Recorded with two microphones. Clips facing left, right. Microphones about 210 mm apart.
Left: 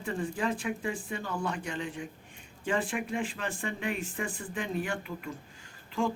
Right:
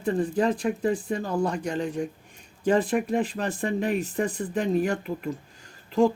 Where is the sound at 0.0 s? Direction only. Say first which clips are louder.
Right 8 dB; 40° right (ahead or behind).